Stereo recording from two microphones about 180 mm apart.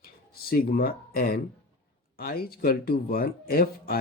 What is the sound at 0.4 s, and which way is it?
Speech, 55° left (ahead or behind).